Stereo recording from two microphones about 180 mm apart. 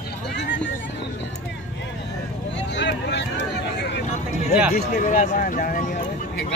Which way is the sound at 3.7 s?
70° left (ahead or behind).